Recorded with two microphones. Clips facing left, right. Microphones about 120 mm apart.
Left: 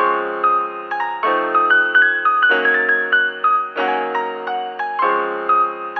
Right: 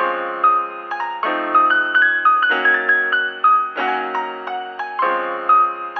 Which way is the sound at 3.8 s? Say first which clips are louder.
Left 2 dB; 15° left (ahead or behind).